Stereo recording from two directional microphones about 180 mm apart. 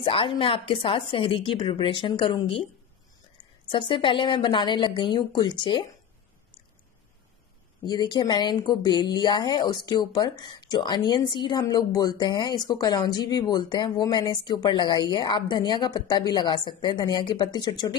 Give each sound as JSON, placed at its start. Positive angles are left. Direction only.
{"t": 0.0, "sound": "a woman's voice", "side_deg": 30}
{"t": 3.7, "sound": "a woman's voice", "side_deg": 30}
{"t": 7.8, "sound": "a woman's voice", "side_deg": 25}